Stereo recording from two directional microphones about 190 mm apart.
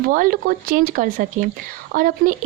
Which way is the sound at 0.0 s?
45° right (ahead or behind).